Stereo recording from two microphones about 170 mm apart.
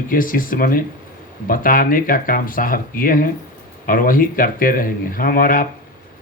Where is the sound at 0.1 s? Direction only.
55° left (ahead or behind).